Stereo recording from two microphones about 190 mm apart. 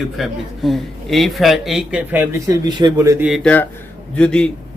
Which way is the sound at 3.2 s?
Centre (ahead or behind).